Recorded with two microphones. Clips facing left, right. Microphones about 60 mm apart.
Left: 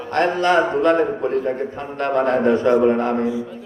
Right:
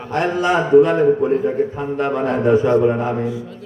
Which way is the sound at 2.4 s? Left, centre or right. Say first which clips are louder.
Right 4 dB; centre.